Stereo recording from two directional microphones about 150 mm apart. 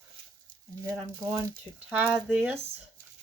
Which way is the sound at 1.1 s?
15° right (ahead or behind).